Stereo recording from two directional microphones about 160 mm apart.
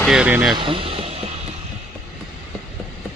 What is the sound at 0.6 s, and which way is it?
Music, 35° right (ahead or behind).